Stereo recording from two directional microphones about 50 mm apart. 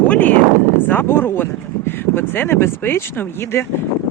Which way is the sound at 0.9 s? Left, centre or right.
Left.